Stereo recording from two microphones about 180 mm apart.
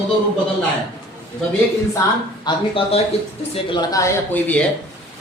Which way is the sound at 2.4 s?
30° left (ahead or behind).